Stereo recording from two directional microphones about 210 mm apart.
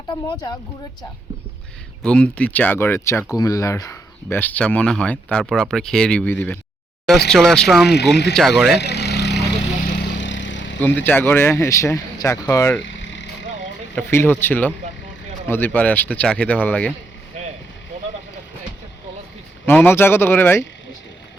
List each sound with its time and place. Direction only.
0.1 s speech: 20° left (ahead or behind)
2.0 s speech: 5° left (ahead or behind)
7.9 s speech: 55° left (ahead or behind)
8.3 s speech: centre (ahead or behind)
8.8 s vehicle: 50° left (ahead or behind)
10.8 s speech: 10° left (ahead or behind)
12.8 s vehicle: 60° left (ahead or behind)
13.9 s speech: 10° left (ahead or behind)
19.6 s speech: 10° left (ahead or behind)